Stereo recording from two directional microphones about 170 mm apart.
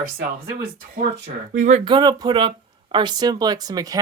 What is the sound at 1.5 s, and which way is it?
Speech, 45° right (ahead or behind).